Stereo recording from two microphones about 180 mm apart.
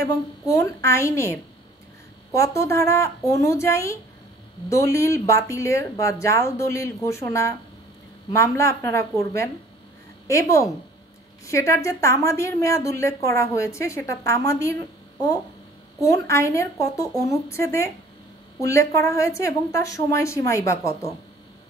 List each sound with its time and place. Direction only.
0.0 s a woman's voice: 15° left (ahead or behind)
8.5 s a woman's voice: 15° left (ahead or behind)